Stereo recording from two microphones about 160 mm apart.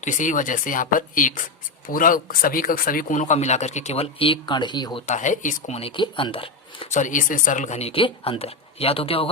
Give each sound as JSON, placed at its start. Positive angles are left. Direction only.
{"t": 0.0, "sound": "speech", "side_deg": 50}
{"t": 5.0, "sound": "speech", "side_deg": 50}
{"t": 6.9, "sound": "speech", "side_deg": 50}